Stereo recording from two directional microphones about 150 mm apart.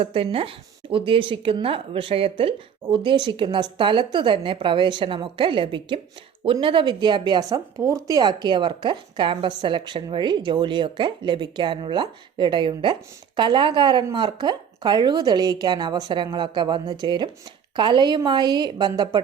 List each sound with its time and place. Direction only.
0.0 s a woman's voice: 40° right (ahead or behind)